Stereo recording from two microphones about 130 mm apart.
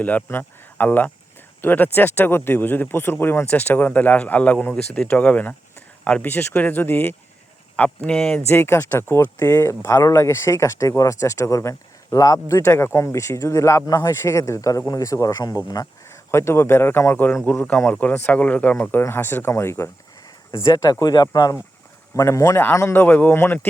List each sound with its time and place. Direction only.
0.0 s speech: 10° left (ahead or behind)
8.4 s speech: 15° left (ahead or behind)